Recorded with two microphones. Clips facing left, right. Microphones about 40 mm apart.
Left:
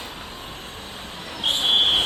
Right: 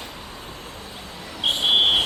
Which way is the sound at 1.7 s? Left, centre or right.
Left.